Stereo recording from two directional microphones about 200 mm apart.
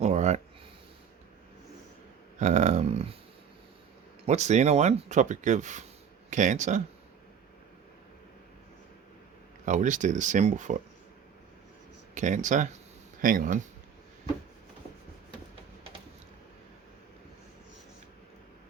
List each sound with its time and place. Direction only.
0.0 s a sound: 35° right (ahead or behind)
2.4 s speech: 35° right (ahead or behind)
4.3 s speech: 35° right (ahead or behind)
9.6 s speech: 40° right (ahead or behind)
12.1 s speech: 40° right (ahead or behind)